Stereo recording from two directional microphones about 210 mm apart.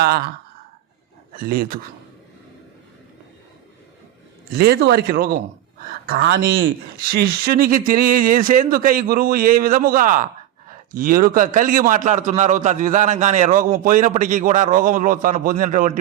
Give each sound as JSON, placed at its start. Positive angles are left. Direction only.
{"t": 0.0, "sound": "speech", "side_deg": -45}
{"t": 1.5, "sound": "speech", "side_deg": -45}
{"t": 4.5, "sound": "a man's voice", "side_deg": -50}